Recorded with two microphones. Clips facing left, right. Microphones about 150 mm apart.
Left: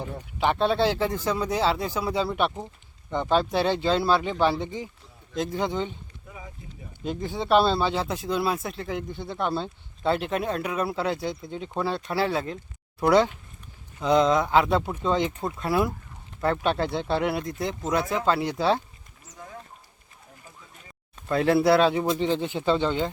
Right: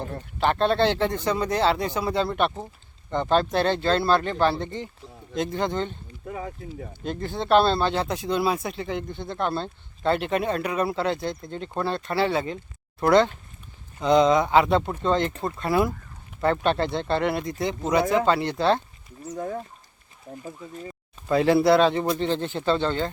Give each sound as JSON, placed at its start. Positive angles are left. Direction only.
{"t": 0.1, "sound": "speech", "side_deg": 10}
{"t": 6.2, "sound": "speech", "side_deg": -60}
{"t": 7.0, "sound": "speech", "side_deg": 10}
{"t": 19.4, "sound": "speech", "side_deg": -45}
{"t": 21.2, "sound": "speech", "side_deg": 0}